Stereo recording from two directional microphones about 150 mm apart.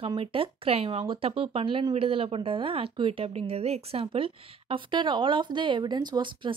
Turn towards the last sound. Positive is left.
turn(degrees=-30)  # may be behind; listen again after turning